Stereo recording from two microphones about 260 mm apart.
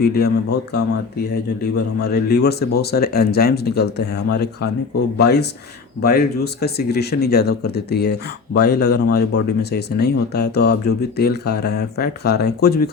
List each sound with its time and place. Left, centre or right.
0.0 s speech: left
2.0 s speech: left